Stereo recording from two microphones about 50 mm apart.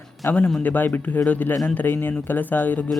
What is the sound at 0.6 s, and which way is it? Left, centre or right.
Speech, left.